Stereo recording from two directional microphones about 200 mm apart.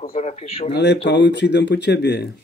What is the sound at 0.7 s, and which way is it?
Speech, 60° left (ahead or behind).